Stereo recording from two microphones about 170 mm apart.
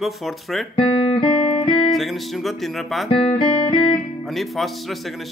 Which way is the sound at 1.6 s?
Centre (ahead or behind).